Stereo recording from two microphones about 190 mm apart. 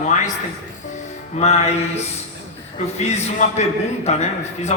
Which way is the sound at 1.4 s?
35° left (ahead or behind).